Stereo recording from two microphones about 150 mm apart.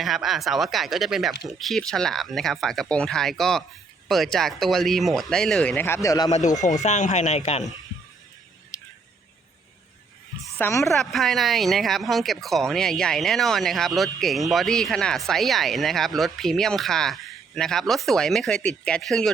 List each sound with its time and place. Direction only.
0.0 s speech: centre (ahead or behind); by 6.3 s 25° left (ahead or behind)
6.8 s speech: 50° left (ahead or behind)
8.7 s a sound: 25° left (ahead or behind)
10.6 s a woman's voice: 15° left (ahead or behind)
10.8 s speech: centre (ahead or behind)